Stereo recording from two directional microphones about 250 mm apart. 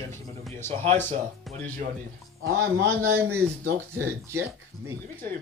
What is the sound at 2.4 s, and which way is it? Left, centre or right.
Speech, right.